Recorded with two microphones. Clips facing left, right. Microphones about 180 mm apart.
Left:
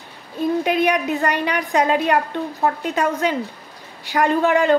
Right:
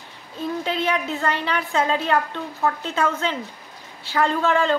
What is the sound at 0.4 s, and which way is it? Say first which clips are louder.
A woman's voice: left 6 dB; 15° left (ahead or behind).